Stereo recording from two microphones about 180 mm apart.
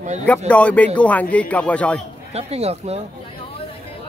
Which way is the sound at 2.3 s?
35° right (ahead or behind).